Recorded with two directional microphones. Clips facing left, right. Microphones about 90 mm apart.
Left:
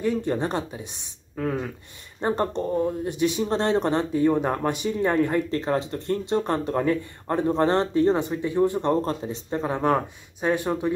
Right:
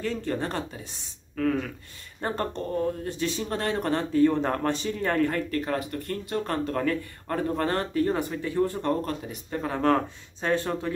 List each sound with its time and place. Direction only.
0.0 s speech: 20° left (ahead or behind)